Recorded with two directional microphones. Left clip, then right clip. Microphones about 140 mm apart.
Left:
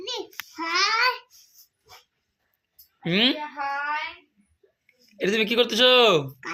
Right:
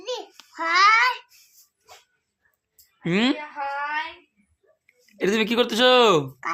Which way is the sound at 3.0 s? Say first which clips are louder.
Left 1 dB; 45° right (ahead or behind).